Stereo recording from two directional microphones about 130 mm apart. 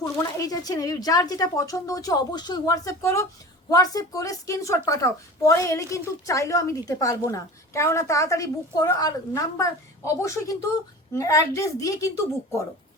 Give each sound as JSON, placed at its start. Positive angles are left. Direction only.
{"t": 0.3, "sound": "a woman's voice", "side_deg": 30}